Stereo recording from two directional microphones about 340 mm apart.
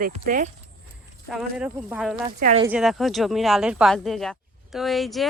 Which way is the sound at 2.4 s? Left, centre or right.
Right.